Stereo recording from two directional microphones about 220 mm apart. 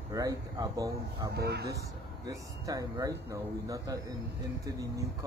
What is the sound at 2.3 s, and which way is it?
Speech, 15° right (ahead or behind).